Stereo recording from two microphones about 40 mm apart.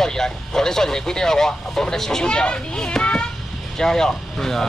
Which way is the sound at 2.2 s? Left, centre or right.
Left.